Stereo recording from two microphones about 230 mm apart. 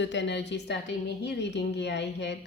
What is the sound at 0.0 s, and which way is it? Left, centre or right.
Speech, left.